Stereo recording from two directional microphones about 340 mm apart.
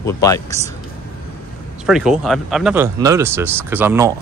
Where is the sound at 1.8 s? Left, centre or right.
Centre.